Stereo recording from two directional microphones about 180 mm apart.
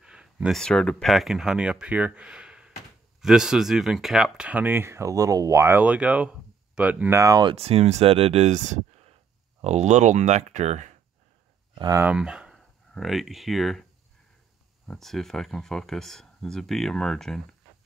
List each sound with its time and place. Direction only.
0.0 s speech: 5° right (ahead or behind)
7.5 s speech: 35° right (ahead or behind)
11.8 s speech: 15° right (ahead or behind)
14.9 s speech: centre (ahead or behind)